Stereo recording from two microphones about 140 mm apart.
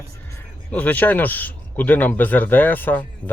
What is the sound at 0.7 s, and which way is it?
Speech, 10° left (ahead or behind).